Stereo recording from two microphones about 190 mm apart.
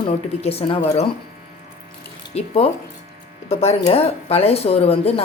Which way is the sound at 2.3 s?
30° left (ahead or behind).